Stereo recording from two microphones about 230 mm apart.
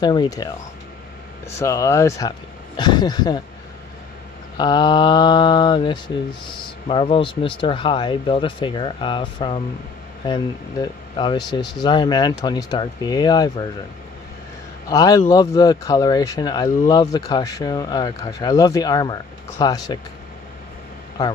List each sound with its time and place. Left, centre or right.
0.0 s speech: centre
1.6 s speech: centre
4.6 s speech: centre
14.9 s speech: centre